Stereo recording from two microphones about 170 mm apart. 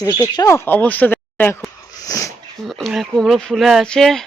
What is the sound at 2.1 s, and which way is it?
Sneeze, 20° left (ahead or behind).